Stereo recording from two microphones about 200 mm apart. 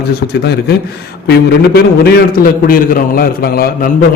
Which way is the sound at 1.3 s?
50° left (ahead or behind).